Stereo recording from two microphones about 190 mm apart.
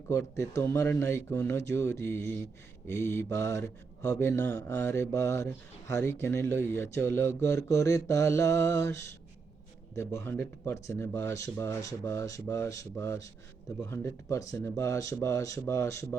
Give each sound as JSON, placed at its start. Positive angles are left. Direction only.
{"t": 0.1, "sound": "speech", "side_deg": 15}